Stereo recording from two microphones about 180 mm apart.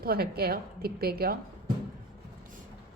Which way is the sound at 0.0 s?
60° right (ahead or behind).